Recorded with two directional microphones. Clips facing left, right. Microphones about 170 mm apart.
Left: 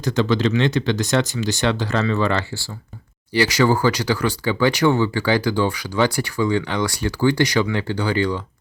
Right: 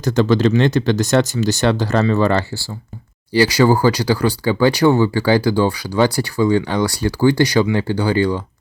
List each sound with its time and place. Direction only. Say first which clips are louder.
0.0 s speech: right 4 dB; 45° right (ahead or behind)